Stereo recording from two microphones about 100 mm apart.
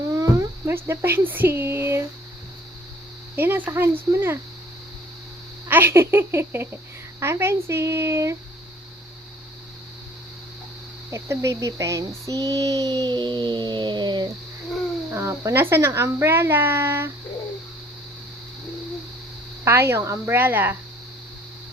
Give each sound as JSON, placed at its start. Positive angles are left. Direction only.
{"t": 0.1, "sound": "speech", "side_deg": -30}
{"t": 3.3, "sound": "speech", "side_deg": -20}
{"t": 5.6, "sound": "speech", "side_deg": -20}
{"t": 11.1, "sound": "child singing", "side_deg": -30}
{"t": 15.1, "sound": "speech", "side_deg": -30}
{"t": 19.6, "sound": "speech", "side_deg": -25}